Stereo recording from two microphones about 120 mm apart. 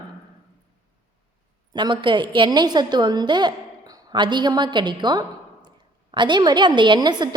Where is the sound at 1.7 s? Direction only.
40° right (ahead or behind).